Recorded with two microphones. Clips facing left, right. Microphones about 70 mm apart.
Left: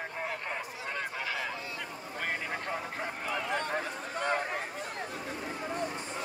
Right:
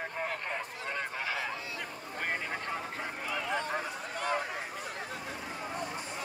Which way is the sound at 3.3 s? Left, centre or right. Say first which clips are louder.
Left 1 dB; left.